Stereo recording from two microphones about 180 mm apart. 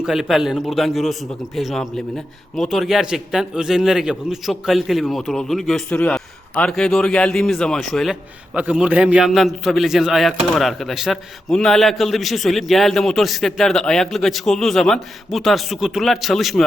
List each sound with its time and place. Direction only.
0.0 s a man's voice: centre (ahead or behind)